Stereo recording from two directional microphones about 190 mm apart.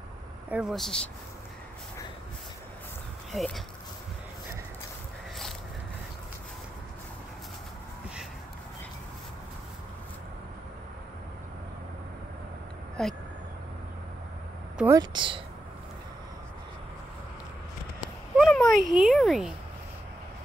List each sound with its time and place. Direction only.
0.5 s speech: 5° right (ahead or behind)
3.3 s speech: centre (ahead or behind)
13.0 s speech: 5° left (ahead or behind)
14.9 s speech: 25° right (ahead or behind)
18.4 s a child's voice: centre (ahead or behind)